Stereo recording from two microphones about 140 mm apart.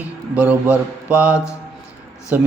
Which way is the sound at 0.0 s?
10° right (ahead or behind).